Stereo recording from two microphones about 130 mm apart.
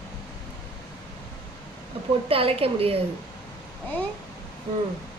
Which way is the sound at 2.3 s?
45° right (ahead or behind).